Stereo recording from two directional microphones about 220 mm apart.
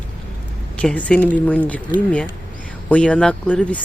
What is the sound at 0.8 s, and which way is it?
Speech, 5° left (ahead or behind).